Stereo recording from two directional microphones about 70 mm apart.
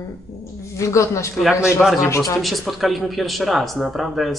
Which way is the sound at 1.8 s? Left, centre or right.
Centre.